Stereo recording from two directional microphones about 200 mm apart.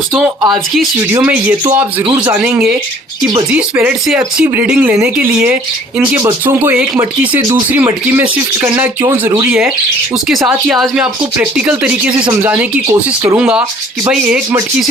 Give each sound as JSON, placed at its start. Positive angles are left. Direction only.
{"t": 1.1, "sound": "speech", "side_deg": -10}
{"t": 1.6, "sound": "speech", "side_deg": -20}
{"t": 2.4, "sound": "speech", "side_deg": 0}